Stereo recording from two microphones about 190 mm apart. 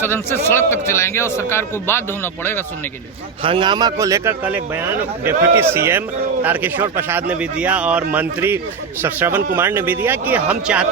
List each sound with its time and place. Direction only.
0.0 s a man's voice: 10° left (ahead or behind)
3.4 s a man's voice: 25° right (ahead or behind); by 10.8 s 5° right (ahead or behind)